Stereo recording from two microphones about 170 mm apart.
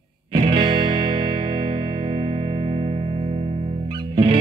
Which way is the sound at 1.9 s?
35° right (ahead or behind).